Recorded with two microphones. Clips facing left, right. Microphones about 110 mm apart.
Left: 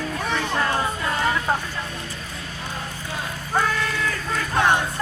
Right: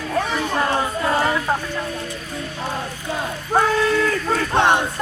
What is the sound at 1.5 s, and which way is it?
Vehicle, 5° right (ahead or behind).